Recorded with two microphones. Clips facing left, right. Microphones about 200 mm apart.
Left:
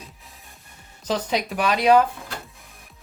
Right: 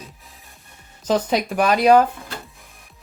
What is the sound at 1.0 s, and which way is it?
Speech, 45° right (ahead or behind).